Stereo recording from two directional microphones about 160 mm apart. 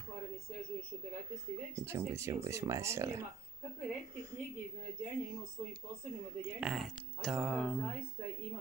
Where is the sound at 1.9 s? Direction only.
20° right (ahead or behind).